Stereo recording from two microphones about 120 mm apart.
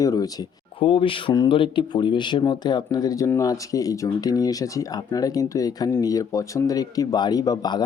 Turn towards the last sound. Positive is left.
turn(degrees=35)  # may be behind; listen again after turning